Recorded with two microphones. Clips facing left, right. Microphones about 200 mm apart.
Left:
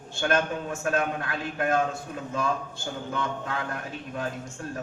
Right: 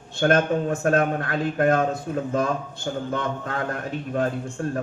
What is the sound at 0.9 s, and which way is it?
A man's voice, 50° right (ahead or behind).